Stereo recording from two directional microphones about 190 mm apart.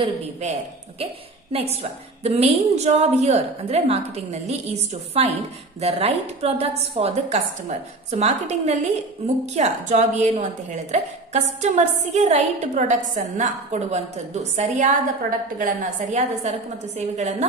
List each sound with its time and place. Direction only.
0.0 s a woman's voice: 35° right (ahead or behind)